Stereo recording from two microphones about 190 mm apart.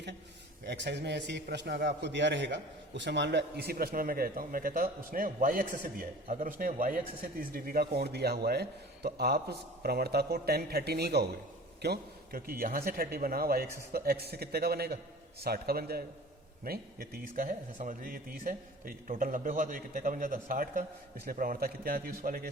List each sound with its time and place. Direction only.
0.6 s a man's voice: 60° right (ahead or behind)